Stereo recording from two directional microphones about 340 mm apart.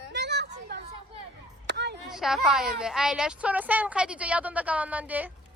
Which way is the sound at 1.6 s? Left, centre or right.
Right.